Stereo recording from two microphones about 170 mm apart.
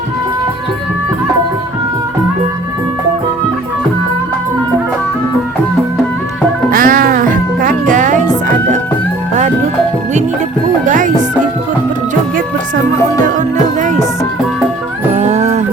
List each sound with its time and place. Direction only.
6.7 s music: 55° right (ahead or behind)
10.8 s music: 50° right (ahead or behind)
15.1 s music: 45° right (ahead or behind)